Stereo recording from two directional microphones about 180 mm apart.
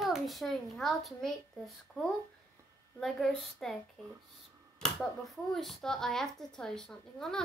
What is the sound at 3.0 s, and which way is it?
Speech, 5° left (ahead or behind).